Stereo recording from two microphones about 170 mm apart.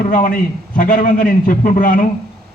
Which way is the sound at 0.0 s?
50° left (ahead or behind).